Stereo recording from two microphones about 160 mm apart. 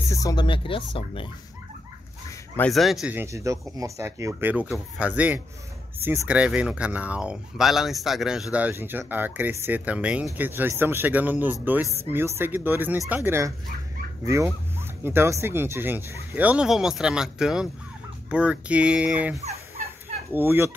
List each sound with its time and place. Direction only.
0.1 s speech: 20° left (ahead or behind)
2.7 s speech: centre (ahead or behind)
3.2 s speech: 20° right (ahead or behind)
20.3 s speech: 15° right (ahead or behind)